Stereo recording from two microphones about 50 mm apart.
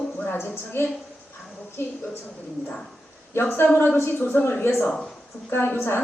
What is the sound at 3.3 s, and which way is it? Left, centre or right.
A woman's voice, left.